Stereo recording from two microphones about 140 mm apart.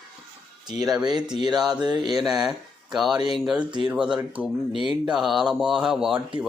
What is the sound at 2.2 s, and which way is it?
Speech, 5° right (ahead or behind).